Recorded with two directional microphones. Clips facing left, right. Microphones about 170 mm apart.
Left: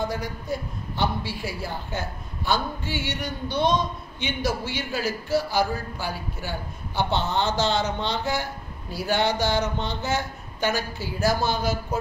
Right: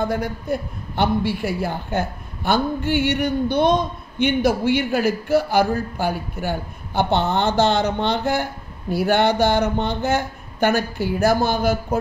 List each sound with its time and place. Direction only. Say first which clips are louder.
0.0 s a woman's voice: right 6 dB; 55° right (ahead or behind)